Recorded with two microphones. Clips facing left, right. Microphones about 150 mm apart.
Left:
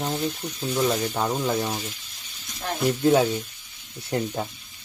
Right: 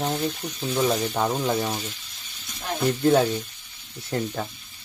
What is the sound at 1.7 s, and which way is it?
Speech, 10° left (ahead or behind).